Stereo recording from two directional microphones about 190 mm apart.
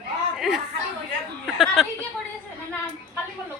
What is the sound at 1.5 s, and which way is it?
Speech, centre (ahead or behind).